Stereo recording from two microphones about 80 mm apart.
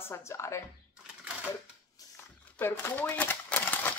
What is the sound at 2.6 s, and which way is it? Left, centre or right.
Speech, left.